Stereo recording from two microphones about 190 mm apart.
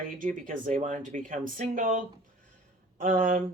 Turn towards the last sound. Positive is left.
turn(degrees=-45)  # may be behind; listen again after turning